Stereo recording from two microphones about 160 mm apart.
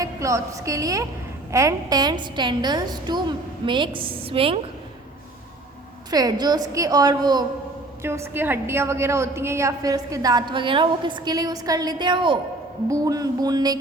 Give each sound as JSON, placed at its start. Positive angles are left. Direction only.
{"t": 0.0, "sound": "a woman's voice", "side_deg": -20}
{"t": 6.1, "sound": "a woman's voice", "side_deg": -25}